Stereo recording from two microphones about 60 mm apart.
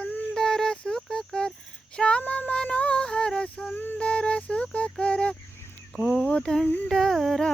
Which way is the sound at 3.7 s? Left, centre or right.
Left.